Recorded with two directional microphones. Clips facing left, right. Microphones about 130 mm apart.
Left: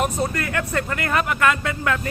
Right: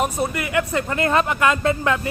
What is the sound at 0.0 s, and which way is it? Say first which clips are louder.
Speech: even; 15° right (ahead or behind).